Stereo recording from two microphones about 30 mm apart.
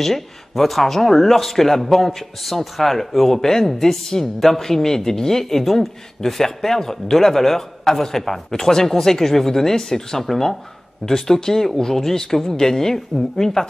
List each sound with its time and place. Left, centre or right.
0.0 s speech: centre